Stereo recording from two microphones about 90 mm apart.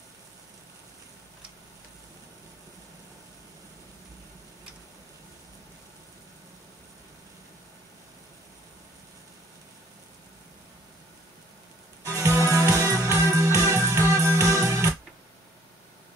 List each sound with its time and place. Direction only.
12.1 s music: 35° right (ahead or behind)